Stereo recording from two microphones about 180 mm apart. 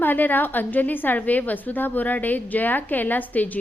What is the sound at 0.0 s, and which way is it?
A woman's voice, 10° left (ahead or behind).